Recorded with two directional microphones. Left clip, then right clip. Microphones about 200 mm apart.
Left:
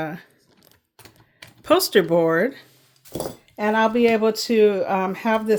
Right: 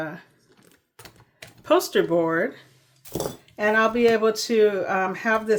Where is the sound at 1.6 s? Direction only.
40° left (ahead or behind).